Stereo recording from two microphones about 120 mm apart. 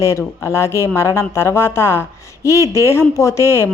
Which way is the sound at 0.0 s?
25° left (ahead or behind).